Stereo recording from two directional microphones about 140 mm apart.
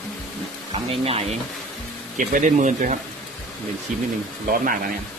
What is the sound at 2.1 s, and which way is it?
Speech, 65° right (ahead or behind).